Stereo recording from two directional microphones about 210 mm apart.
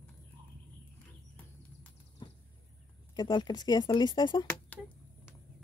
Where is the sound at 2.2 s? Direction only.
20° left (ahead or behind).